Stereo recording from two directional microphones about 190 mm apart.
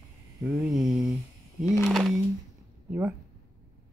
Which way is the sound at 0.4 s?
Centre (ahead or behind).